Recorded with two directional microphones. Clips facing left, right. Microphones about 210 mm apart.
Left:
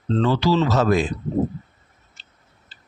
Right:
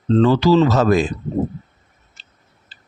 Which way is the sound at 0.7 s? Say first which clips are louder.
Right 3 dB; 45° right (ahead or behind).